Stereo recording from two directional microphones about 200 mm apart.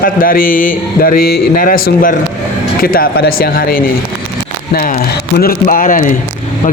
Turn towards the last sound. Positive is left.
turn(degrees=40)  # may be behind; listen again after turning